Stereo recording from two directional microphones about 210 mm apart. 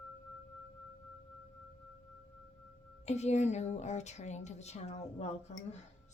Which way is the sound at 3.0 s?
30° left (ahead or behind).